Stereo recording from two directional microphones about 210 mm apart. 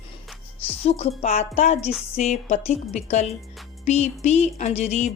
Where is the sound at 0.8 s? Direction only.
30° left (ahead or behind).